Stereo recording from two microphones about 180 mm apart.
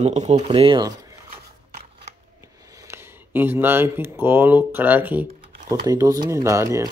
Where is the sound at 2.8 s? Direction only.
15° right (ahead or behind).